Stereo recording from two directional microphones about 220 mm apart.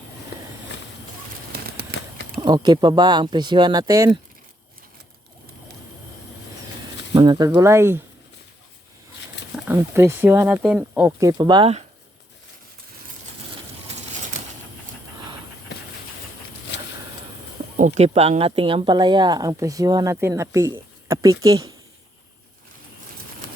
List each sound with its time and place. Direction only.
1.5 s a sound: 45° right (ahead or behind)
2.4 s speech: 20° right (ahead or behind)
7.1 s speech: 20° right (ahead or behind)
9.6 s speech: 10° right (ahead or behind); by 11.9 s 25° right (ahead or behind)
17.7 s speech: 30° right (ahead or behind); by 21.7 s 15° right (ahead or behind)